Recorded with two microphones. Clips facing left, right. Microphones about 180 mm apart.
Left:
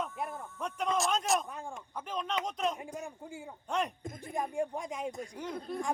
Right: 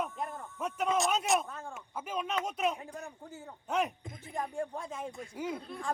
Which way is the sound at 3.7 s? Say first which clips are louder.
Right 2 dB; 5° right (ahead or behind).